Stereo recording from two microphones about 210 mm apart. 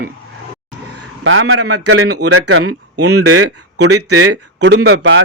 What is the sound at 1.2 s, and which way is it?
Speech, 75° right (ahead or behind).